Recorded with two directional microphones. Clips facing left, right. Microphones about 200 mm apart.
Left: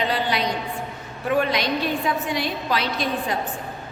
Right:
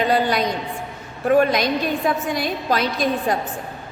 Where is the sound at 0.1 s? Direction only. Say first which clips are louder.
Right 5 dB; 45° right (ahead or behind).